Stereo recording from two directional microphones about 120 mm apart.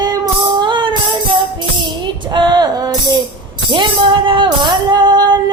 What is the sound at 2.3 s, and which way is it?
Female singing, 35° right (ahead or behind).